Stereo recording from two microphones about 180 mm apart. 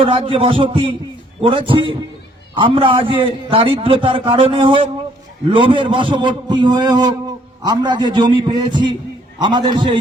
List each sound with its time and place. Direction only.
0.0 s a man's voice: 30° right (ahead or behind)